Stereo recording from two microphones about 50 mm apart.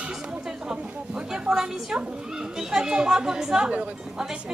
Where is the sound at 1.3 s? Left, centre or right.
Centre.